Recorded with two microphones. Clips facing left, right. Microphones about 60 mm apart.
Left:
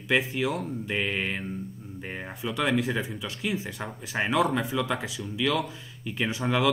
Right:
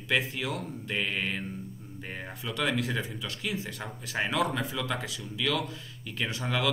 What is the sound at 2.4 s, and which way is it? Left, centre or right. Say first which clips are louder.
Speech: left 4 dB; centre.